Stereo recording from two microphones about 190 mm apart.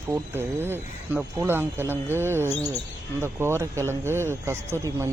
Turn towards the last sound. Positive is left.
turn(degrees=-15)  # may be behind; listen again after turning